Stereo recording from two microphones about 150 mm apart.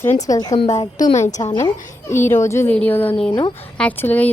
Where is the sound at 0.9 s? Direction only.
55° left (ahead or behind).